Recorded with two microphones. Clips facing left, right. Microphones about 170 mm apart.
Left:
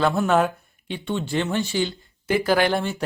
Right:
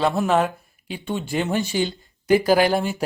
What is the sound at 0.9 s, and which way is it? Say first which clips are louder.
Speech: even; 15° right (ahead or behind).